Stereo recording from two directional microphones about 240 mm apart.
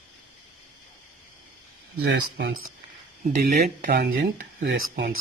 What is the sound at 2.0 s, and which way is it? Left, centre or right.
Speech, right.